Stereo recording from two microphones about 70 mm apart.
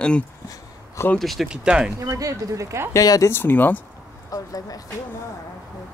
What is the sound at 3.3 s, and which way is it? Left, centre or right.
Speech, left.